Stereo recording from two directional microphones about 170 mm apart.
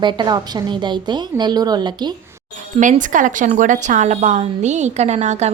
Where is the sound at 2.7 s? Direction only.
50° right (ahead or behind).